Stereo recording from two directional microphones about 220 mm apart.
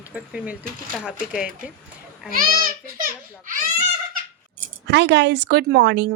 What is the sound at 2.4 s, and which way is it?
A child's voice, 40° right (ahead or behind).